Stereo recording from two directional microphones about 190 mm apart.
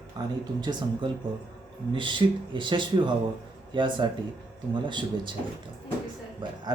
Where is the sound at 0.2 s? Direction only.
20° right (ahead or behind).